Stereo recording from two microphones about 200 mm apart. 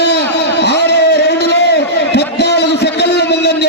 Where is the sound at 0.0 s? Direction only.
55° left (ahead or behind).